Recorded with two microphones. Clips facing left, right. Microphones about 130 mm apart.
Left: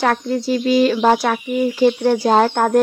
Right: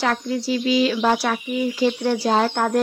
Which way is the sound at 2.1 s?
50° left (ahead or behind).